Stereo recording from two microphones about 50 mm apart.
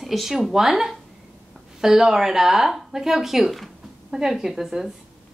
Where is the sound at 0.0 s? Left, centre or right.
Centre.